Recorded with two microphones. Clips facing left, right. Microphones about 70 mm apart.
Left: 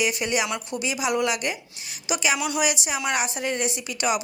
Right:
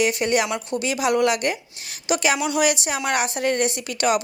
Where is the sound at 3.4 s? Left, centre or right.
Right.